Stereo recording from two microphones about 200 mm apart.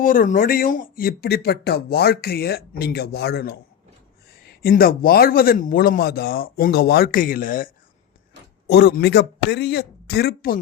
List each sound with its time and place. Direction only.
0.0 s speech: 45° left (ahead or behind)
8.6 s a man's voice: 55° left (ahead or behind)